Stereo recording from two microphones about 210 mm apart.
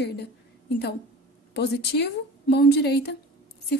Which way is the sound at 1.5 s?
50° left (ahead or behind).